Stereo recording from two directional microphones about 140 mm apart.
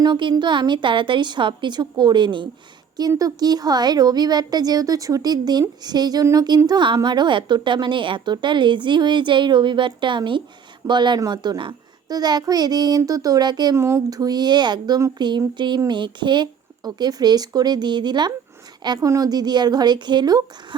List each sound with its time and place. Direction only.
0.0 s a woman's voice: 35° right (ahead or behind)
13.7 s a woman's voice: 20° right (ahead or behind)